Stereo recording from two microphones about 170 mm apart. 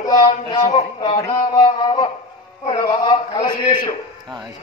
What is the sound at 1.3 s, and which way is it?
A man's voice, 25° left (ahead or behind).